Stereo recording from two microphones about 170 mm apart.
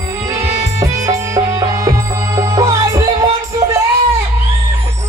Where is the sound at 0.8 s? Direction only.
20° right (ahead or behind).